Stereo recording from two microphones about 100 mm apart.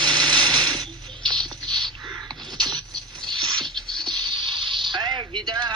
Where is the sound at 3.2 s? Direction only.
50° right (ahead or behind).